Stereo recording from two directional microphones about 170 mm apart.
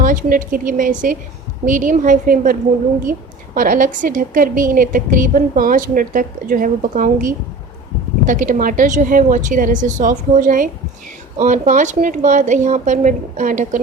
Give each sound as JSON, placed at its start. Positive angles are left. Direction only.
{"t": 0.0, "sound": "a woman's voice", "side_deg": -50}